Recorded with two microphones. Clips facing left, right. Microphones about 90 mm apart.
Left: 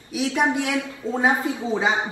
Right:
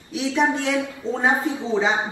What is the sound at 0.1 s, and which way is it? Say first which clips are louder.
A woman's voice: right 1 dB; 20° left (ahead or behind).